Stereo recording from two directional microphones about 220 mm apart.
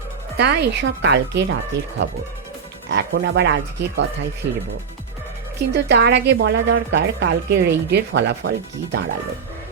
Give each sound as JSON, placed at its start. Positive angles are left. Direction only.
{"t": 0.3, "sound": "a woman's voice", "side_deg": -50}
{"t": 5.7, "sound": "a woman's voice", "side_deg": -50}